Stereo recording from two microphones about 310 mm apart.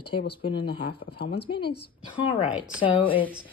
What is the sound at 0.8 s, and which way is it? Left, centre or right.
Speech, left.